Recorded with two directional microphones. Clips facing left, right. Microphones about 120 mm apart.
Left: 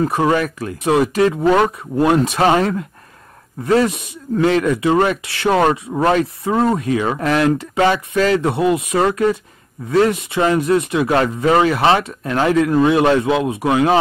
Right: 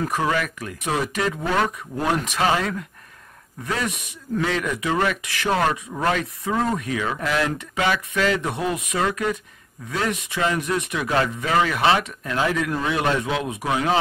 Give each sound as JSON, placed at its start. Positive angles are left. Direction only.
{"t": 0.1, "sound": "speech", "side_deg": 30}
{"t": 13.7, "sound": "speech", "side_deg": 45}